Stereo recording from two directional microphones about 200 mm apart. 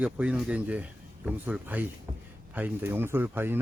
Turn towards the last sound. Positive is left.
turn(degrees=-10)  # may be behind; listen again after turning